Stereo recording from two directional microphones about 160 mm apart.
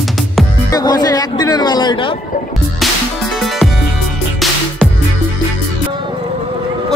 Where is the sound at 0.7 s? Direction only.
25° left (ahead or behind).